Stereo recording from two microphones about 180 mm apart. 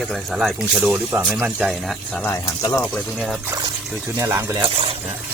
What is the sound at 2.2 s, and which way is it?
Speech, 15° left (ahead or behind).